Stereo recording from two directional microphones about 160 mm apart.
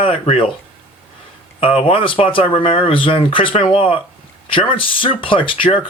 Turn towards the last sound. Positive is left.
turn(degrees=35)  # may be behind; listen again after turning